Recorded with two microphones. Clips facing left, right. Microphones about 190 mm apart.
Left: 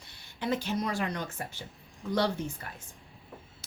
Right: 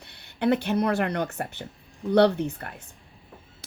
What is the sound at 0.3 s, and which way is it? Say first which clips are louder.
A woman's voice: right 8 dB; 60° right (ahead or behind).